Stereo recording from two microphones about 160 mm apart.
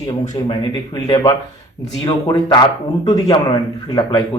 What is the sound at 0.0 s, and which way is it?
A man's voice, 30° left (ahead or behind).